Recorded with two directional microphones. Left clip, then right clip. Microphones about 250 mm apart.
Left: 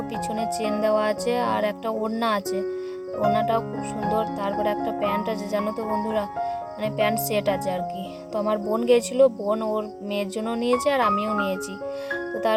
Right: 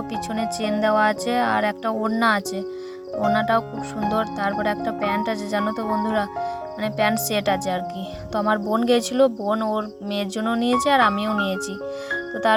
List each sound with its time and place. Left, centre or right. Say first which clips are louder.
0.3 s speech: right 1 dB; centre
12.1 s music: right 4 dB; centre